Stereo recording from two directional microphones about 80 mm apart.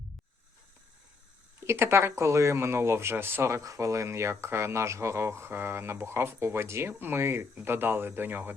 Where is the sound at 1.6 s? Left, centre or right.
Right.